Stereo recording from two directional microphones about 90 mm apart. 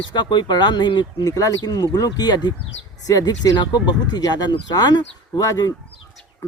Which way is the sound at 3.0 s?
45° left (ahead or behind).